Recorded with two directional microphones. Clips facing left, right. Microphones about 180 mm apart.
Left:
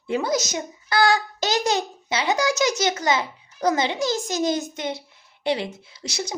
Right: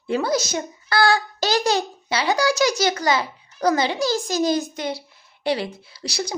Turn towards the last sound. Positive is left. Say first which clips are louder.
# right 2 dB
turn(degrees=20)  # may be behind; listen again after turning